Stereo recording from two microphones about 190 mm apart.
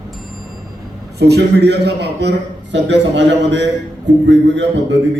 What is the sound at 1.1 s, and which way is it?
A man's voice, 60° right (ahead or behind).